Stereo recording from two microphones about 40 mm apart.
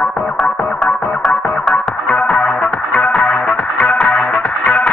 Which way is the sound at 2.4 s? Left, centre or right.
Left.